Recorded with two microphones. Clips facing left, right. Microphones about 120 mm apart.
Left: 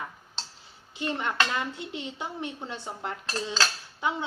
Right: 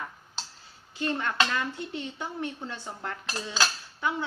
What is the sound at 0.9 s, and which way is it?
Speech, 15° left (ahead or behind).